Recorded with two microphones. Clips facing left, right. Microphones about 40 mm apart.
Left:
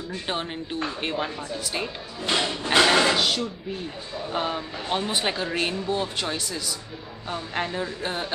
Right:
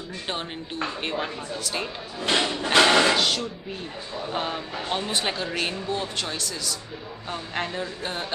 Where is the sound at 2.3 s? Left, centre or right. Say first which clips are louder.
Right 1 dB; right.